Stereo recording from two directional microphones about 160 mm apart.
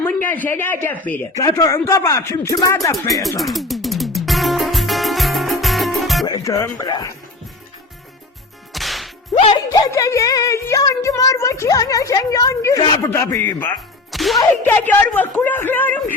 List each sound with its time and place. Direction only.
0.0 s speech: 10° left (ahead or behind)
3.1 s music: centre (ahead or behind)
6.2 s speech: 25° left (ahead or behind)
8.7 s whip: centre (ahead or behind)
9.3 s speech: 40° left (ahead or behind)
9.7 s speech: 20° left (ahead or behind)
14.1 s whip: centre (ahead or behind)
14.7 s speech: 10° left (ahead or behind)